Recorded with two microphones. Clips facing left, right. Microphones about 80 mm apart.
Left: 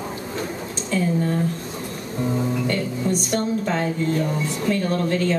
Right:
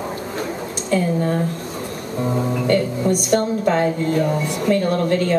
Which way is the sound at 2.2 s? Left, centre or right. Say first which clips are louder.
Right 2 dB; right.